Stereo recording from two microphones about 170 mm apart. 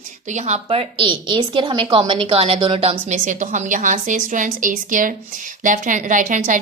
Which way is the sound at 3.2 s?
45° right (ahead or behind).